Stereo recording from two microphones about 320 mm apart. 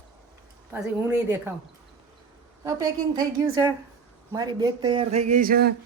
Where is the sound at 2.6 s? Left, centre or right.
Centre; by 5.8 s right.